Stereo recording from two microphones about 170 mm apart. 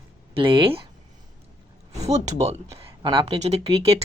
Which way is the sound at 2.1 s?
40° right (ahead or behind).